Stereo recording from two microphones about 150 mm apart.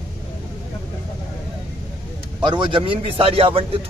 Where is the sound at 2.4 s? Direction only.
30° right (ahead or behind).